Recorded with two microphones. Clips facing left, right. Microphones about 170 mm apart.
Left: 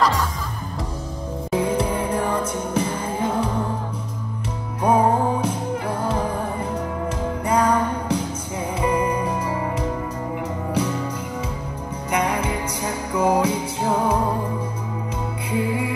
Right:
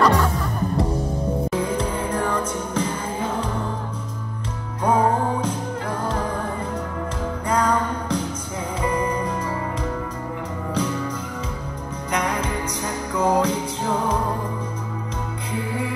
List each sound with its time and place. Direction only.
0.0 s music: 60° right (ahead or behind)
1.5 s music: 10° left (ahead or behind)
4.8 s music: 10° left (ahead or behind)
7.4 s music: 10° left (ahead or behind)
10.7 s music: 10° left (ahead or behind)
12.1 s music: 10° left (ahead or behind)
15.5 s music: 10° left (ahead or behind)